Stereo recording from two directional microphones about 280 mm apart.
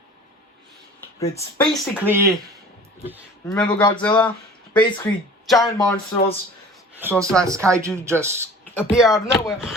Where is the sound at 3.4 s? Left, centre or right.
Centre.